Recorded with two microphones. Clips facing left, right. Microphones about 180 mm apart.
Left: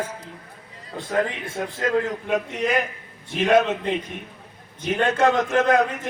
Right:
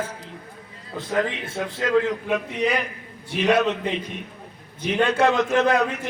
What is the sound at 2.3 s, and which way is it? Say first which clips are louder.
Speech: left 3 dB; 45° left (ahead or behind).